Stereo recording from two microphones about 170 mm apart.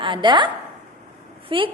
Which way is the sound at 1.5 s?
30° right (ahead or behind).